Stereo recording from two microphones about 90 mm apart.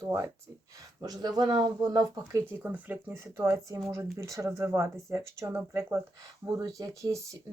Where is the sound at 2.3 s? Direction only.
30° right (ahead or behind).